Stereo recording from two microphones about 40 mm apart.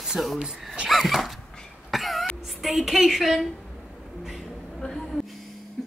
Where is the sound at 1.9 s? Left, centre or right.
Centre.